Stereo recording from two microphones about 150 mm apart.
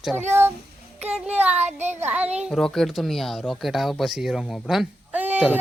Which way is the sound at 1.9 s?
15° right (ahead or behind).